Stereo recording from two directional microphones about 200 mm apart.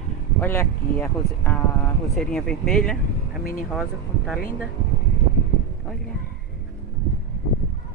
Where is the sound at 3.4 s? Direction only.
45° left (ahead or behind).